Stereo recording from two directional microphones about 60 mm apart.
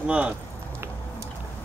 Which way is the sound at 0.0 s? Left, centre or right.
Centre.